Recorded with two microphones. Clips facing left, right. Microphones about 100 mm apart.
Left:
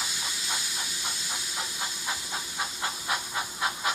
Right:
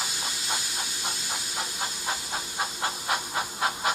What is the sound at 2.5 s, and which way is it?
Steam, 35° right (ahead or behind).